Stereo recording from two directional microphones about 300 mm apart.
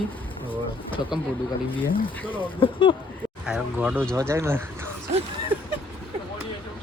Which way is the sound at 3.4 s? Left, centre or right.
Centre.